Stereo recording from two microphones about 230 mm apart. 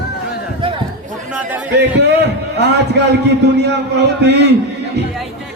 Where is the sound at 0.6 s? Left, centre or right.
Right.